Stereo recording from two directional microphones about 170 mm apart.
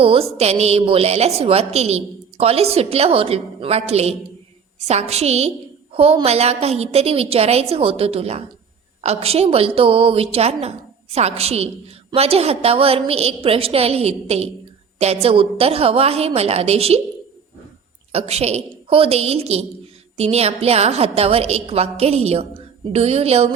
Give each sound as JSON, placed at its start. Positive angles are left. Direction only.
{"t": 0.0, "sound": "a woman's voice", "side_deg": -35}
{"t": 18.1, "sound": "a woman's voice", "side_deg": -40}